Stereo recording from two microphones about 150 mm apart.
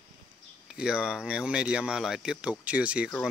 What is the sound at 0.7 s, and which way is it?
Speech, 5° right (ahead or behind).